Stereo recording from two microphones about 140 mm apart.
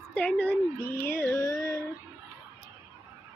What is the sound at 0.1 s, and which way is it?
Speech, 10° left (ahead or behind).